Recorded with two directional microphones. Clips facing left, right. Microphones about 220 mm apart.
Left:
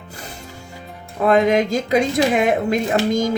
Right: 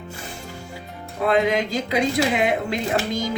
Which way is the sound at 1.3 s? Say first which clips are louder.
Left 5 dB; 45° left (ahead or behind).